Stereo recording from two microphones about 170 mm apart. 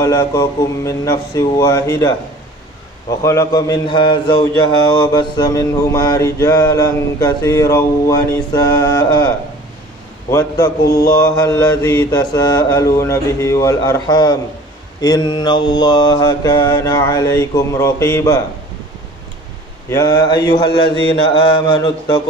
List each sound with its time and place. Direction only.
0.0 s mantra: 20° left (ahead or behind)
10.3 s mantra: 20° left (ahead or behind)
19.9 s mantra: 25° left (ahead or behind)